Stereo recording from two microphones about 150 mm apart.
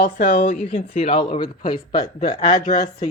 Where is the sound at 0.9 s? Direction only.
45° left (ahead or behind).